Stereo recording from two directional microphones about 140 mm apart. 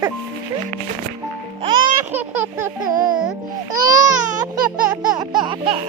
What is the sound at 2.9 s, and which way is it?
Music, 75° right (ahead or behind).